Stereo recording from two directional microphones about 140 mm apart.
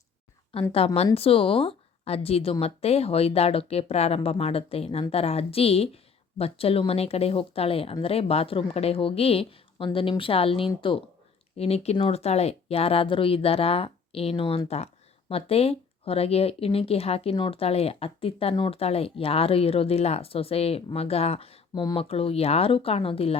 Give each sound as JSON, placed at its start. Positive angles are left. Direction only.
{"t": 0.5, "sound": "a woman's voice", "side_deg": 40}
{"t": 18.8, "sound": "a woman's voice", "side_deg": 45}